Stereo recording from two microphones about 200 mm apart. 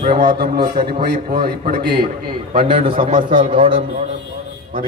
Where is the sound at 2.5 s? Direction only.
25° right (ahead or behind).